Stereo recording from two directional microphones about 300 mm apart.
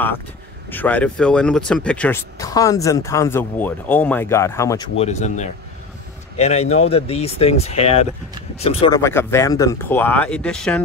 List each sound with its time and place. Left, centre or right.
0.7 s speech: centre